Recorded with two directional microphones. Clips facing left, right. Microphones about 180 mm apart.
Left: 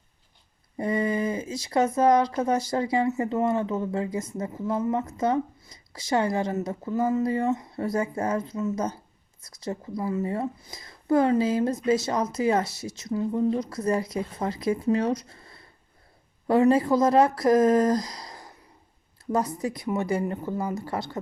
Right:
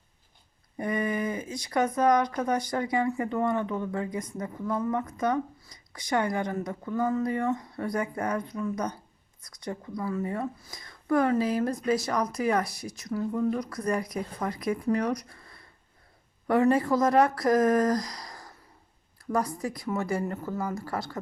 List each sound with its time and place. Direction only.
0.8 s speech: 25° left (ahead or behind)